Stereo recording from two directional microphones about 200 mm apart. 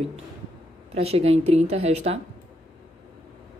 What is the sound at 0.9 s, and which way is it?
Speech, 30° right (ahead or behind).